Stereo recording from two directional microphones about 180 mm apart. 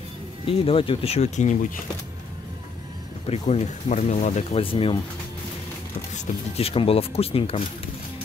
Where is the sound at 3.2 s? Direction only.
35° left (ahead or behind).